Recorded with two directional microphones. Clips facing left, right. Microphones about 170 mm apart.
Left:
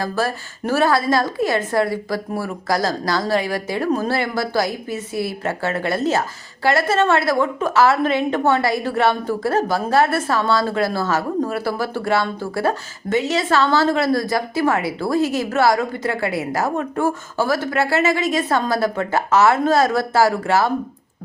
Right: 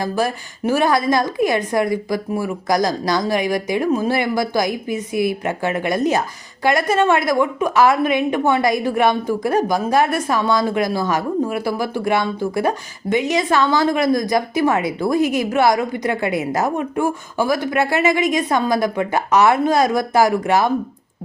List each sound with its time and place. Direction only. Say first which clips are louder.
0.0 s a woman's voice: right 2 dB; 15° right (ahead or behind)